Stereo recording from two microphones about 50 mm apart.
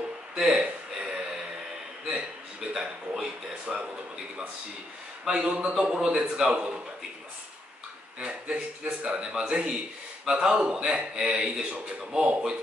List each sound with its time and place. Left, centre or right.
0.6 s a sound: centre
2.7 s a man's voice: centre
5.2 s a man's voice: centre
6.4 s a man's voice: right
8.2 s a man's voice: right